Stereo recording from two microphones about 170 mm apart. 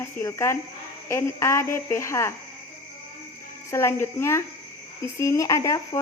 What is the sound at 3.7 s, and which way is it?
Speech, 15° left (ahead or behind).